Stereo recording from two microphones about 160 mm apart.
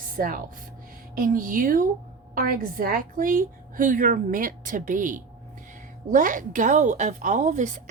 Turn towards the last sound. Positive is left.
turn(degrees=-50)  # may be behind; listen again after turning